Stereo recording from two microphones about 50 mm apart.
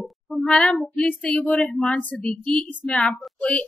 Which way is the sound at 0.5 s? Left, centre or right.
Left.